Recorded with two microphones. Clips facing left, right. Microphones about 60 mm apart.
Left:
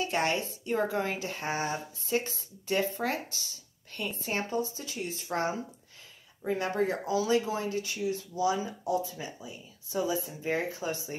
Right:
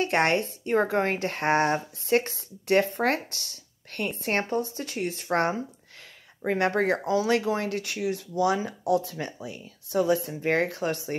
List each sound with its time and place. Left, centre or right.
0.0 s speech: right